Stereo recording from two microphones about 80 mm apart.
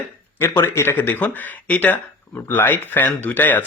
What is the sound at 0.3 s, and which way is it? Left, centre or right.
Speech, left.